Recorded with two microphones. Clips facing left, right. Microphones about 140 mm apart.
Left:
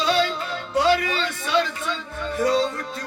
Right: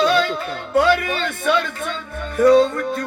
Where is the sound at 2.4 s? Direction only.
55° right (ahead or behind).